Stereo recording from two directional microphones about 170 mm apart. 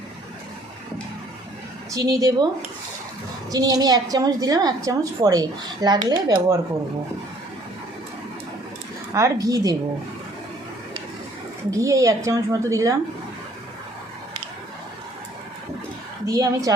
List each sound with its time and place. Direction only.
1.9 s a woman's voice: 20° right (ahead or behind)
3.5 s a woman's voice: 20° right (ahead or behind)
9.1 s a woman's voice: 20° right (ahead or behind)
11.7 s a woman's voice: 20° right (ahead or behind)
16.2 s a woman's voice: 20° right (ahead or behind)